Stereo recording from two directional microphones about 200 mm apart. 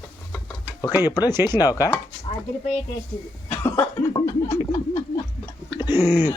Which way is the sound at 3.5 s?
15° left (ahead or behind).